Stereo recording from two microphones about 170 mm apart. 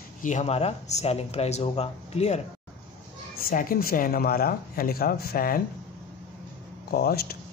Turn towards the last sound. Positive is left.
turn(degrees=60)  # may be behind; listen again after turning